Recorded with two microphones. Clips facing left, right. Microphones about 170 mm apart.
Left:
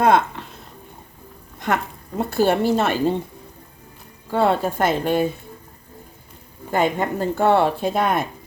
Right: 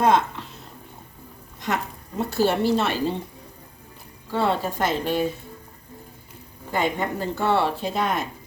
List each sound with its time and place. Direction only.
1.5 s a woman's voice: 55° left (ahead or behind)
4.3 s a woman's voice: 50° left (ahead or behind)
6.7 s a woman's voice: 50° left (ahead or behind)